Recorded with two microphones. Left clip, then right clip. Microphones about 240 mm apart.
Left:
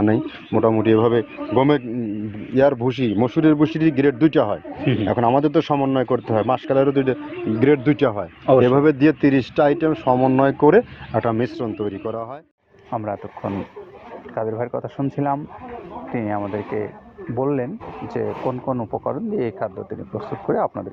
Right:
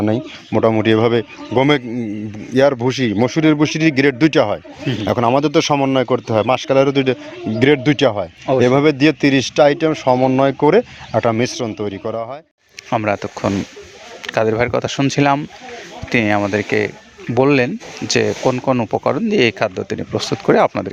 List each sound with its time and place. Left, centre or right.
0.0 s speech: right
12.9 s speech: right
14.9 s speech: right